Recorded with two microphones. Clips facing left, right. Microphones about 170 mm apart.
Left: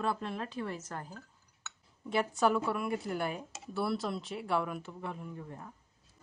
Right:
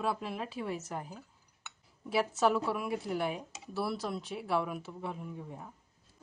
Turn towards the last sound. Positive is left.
turn(degrees=-5)  # may be behind; listen again after turning